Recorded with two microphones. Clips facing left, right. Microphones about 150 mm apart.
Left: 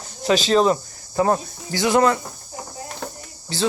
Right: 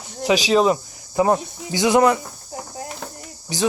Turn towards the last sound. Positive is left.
turn(degrees=-15)  # may be behind; listen again after turning